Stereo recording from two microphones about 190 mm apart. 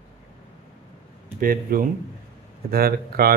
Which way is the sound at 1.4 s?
50° right (ahead or behind).